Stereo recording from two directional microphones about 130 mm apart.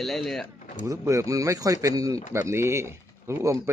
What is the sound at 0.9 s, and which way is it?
A man's voice, 25° right (ahead or behind).